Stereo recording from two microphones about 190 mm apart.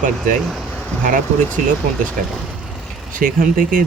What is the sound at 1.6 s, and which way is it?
Speech, 40° right (ahead or behind).